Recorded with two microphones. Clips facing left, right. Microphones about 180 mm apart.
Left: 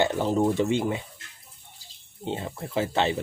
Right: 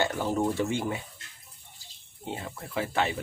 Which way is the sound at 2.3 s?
25° left (ahead or behind).